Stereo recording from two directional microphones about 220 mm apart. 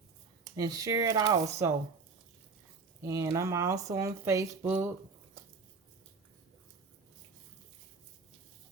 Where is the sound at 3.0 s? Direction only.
15° right (ahead or behind).